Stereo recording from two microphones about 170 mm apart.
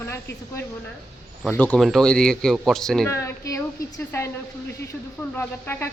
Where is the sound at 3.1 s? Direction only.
15° left (ahead or behind).